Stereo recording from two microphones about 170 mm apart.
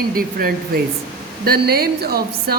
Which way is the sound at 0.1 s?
60° right (ahead or behind).